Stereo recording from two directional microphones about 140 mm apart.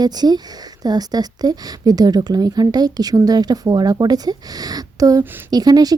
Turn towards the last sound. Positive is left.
turn(degrees=-25)  # may be behind; listen again after turning